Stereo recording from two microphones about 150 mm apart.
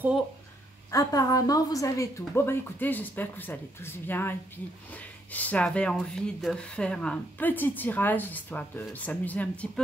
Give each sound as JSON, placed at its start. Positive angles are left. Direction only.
{"t": 0.9, "sound": "speech", "side_deg": 25}